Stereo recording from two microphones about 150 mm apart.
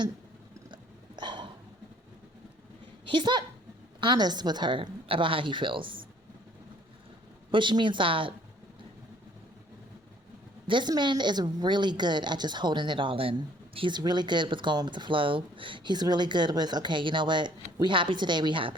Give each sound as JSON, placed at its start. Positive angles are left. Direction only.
{"t": 0.7, "sound": "a sound", "side_deg": -30}
{"t": 3.1, "sound": "a woman's voice", "side_deg": -30}
{"t": 7.5, "sound": "a woman's voice", "side_deg": -30}
{"t": 10.7, "sound": "a woman's voice", "side_deg": -30}